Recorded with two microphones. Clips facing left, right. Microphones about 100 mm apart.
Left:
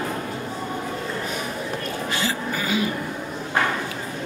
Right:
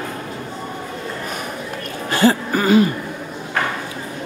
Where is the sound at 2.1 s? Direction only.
50° right (ahead or behind).